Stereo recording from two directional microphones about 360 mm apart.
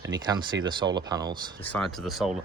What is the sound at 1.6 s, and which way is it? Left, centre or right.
Speech, centre.